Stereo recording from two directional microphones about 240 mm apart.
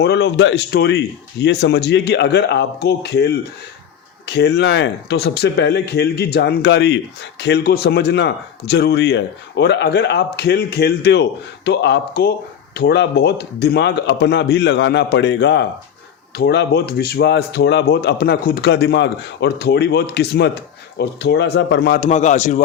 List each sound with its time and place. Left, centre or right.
0.0 s speech: left